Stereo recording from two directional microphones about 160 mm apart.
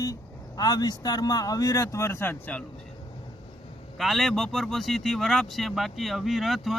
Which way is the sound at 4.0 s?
Centre (ahead or behind).